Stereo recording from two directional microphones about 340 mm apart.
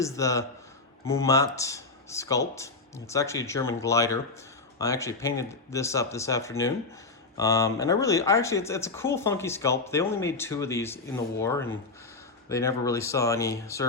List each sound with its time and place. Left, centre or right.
0.0 s speech: centre